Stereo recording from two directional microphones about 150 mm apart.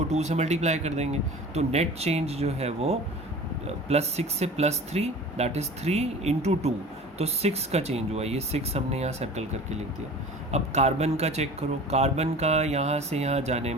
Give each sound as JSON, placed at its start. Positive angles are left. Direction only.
{"t": 0.1, "sound": "speech", "side_deg": -50}